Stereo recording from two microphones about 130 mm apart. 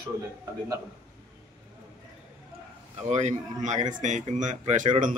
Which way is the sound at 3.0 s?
65° right (ahead or behind).